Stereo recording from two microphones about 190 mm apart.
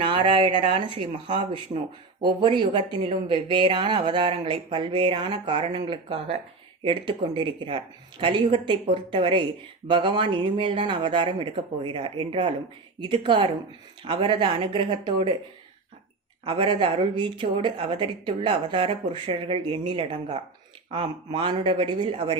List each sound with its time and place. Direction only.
0.0 s a woman's voice: 30° right (ahead or behind)
16.4 s a woman's voice: 25° right (ahead or behind)